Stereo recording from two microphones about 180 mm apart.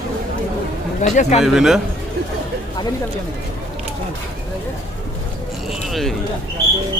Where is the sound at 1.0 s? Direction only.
40° left (ahead or behind).